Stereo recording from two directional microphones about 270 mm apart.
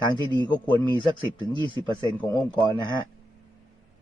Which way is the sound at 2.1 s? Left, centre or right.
Centre.